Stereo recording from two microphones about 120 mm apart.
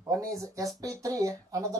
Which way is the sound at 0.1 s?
30° right (ahead or behind).